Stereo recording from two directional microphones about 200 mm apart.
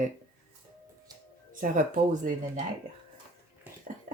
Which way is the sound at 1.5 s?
40° right (ahead or behind).